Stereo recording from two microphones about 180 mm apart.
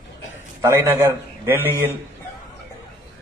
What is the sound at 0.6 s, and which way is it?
A man's voice, 15° right (ahead or behind).